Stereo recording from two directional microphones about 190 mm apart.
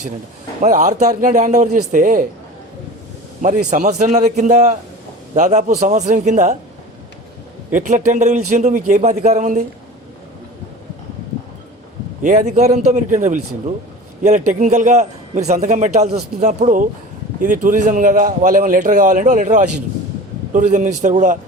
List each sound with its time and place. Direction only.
0.6 s a man's voice: 40° right (ahead or behind)
3.4 s a man's voice: 40° right (ahead or behind)
7.7 s a man's voice: 40° right (ahead or behind)
12.2 s a man's voice: 40° right (ahead or behind)